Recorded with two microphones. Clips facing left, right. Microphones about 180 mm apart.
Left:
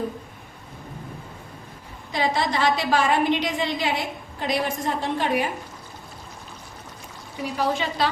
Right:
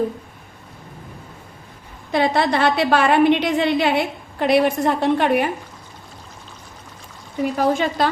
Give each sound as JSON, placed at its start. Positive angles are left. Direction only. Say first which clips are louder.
{"t": 2.1, "sound": "a woman's voice", "louder": "right 6 dB", "side_deg": -60}
{"t": 7.5, "sound": "a woman's voice", "louder": "right 5 dB", "side_deg": -50}